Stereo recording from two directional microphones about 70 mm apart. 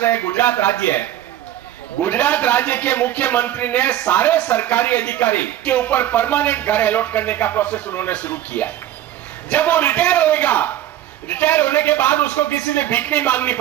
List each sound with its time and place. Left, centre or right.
0.0 s a man's voice: left